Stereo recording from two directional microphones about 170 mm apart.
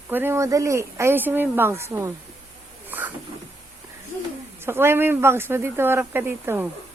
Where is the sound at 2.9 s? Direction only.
10° right (ahead or behind).